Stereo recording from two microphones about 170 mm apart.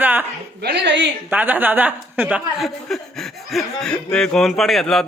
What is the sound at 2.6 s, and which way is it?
Chuckle, centre (ahead or behind).